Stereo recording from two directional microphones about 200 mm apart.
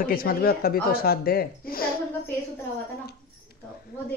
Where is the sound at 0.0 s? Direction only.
50° left (ahead or behind).